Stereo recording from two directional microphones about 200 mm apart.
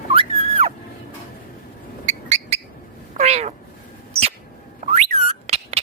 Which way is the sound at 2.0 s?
35° right (ahead or behind).